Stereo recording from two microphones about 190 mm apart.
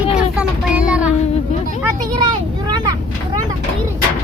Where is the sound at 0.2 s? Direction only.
5° right (ahead or behind).